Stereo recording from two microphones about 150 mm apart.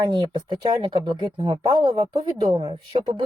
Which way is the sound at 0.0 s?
30° right (ahead or behind).